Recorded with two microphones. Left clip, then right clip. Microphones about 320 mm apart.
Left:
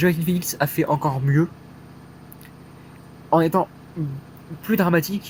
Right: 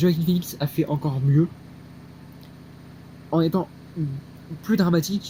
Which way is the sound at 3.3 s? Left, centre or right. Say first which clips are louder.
Left 5 dB; left.